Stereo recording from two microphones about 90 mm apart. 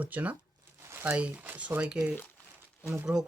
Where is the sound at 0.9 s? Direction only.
25° right (ahead or behind).